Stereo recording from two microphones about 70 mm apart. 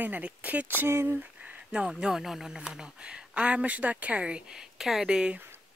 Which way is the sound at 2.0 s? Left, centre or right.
Centre.